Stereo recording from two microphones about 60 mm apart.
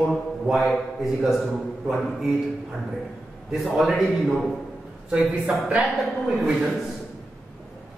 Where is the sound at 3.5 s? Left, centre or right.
Centre.